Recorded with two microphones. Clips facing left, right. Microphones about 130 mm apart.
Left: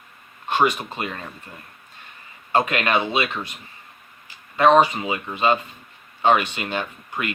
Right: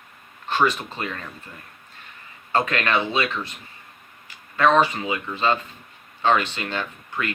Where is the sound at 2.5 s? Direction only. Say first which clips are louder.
Left 2 dB; 15° left (ahead or behind).